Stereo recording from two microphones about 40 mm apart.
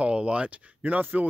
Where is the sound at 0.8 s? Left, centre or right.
Right.